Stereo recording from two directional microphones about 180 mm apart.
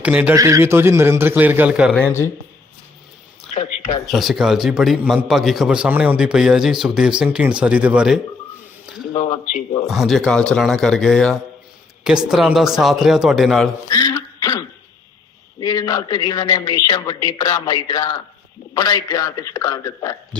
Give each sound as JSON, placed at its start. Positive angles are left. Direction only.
{"t": 0.0, "sound": "a man's voice", "side_deg": -10}
{"t": 2.0, "sound": "speech", "side_deg": 15}
{"t": 4.0, "sound": "a man's voice", "side_deg": 0}
{"t": 9.8, "sound": "a man's voice", "side_deg": 0}
{"t": 13.9, "sound": "a sound", "side_deg": 20}
{"t": 15.6, "sound": "speech", "side_deg": 20}